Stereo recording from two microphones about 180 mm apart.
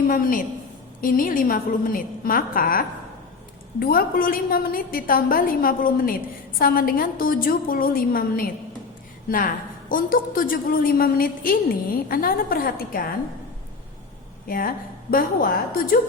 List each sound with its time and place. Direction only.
0.1 s a woman's voice: 50° left (ahead or behind)
9.9 s a woman's voice: 50° left (ahead or behind)
14.4 s a woman's voice: 55° left (ahead or behind)